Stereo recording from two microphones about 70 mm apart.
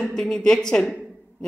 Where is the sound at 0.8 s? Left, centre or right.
Centre.